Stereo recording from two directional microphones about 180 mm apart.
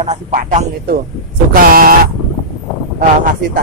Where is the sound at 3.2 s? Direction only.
50° right (ahead or behind).